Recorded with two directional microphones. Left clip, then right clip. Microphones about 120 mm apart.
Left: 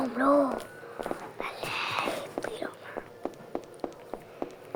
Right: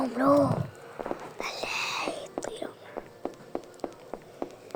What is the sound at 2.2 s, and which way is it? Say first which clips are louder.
Whispering: left 1 dB; 15° right (ahead or behind).